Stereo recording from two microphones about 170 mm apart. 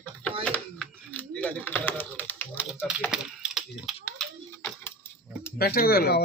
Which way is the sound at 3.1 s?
5° right (ahead or behind).